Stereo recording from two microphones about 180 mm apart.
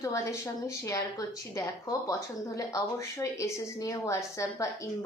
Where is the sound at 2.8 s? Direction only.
15° left (ahead or behind).